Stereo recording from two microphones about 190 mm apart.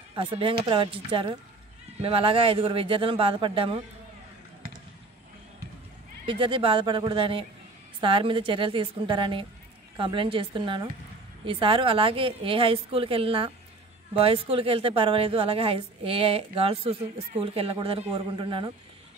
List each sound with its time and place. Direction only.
0.1 s a woman's voice: 25° right (ahead or behind)
6.2 s a woman's voice: 25° right (ahead or behind)